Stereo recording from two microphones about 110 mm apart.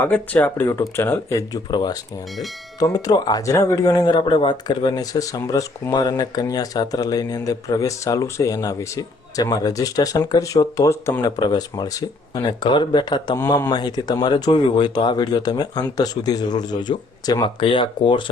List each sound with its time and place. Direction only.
0.0 s speech: 15° left (ahead or behind)
11.2 s speech: 40° left (ahead or behind)